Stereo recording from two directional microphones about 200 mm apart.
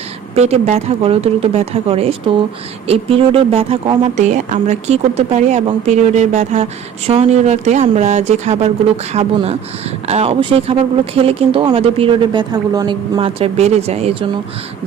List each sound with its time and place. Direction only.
0.3 s speech: 30° right (ahead or behind)